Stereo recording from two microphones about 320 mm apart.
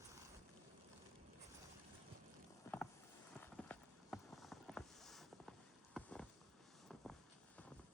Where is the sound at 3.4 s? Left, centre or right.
Centre.